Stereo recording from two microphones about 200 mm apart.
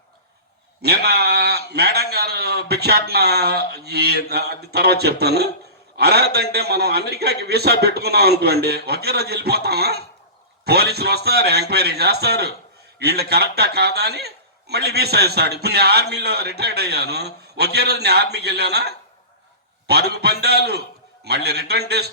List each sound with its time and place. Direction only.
0.8 s a man's voice: 55° right (ahead or behind)